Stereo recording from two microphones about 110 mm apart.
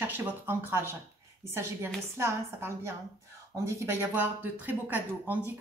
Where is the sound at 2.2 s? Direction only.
25° right (ahead or behind).